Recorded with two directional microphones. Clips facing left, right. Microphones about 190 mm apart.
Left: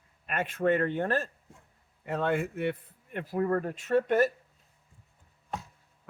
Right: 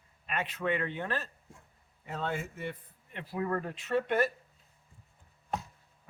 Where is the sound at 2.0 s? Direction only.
60° left (ahead or behind).